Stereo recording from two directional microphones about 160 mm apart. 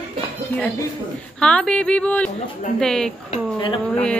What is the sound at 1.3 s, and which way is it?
A woman's voice, 5° left (ahead or behind).